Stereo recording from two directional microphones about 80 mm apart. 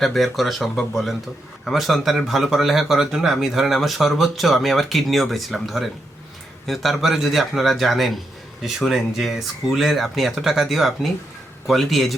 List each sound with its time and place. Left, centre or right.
0.0 s speech: centre